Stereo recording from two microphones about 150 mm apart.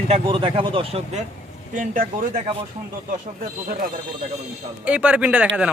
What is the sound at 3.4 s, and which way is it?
Speech, 70° right (ahead or behind).